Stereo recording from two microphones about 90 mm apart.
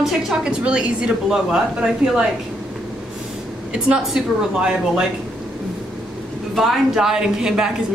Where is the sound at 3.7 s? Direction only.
5° right (ahead or behind).